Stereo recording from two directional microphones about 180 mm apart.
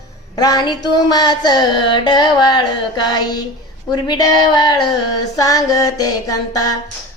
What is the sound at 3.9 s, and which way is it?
Child singing, 25° left (ahead or behind).